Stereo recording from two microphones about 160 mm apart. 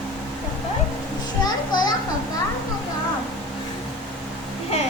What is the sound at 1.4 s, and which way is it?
Children playing, 25° left (ahead or behind).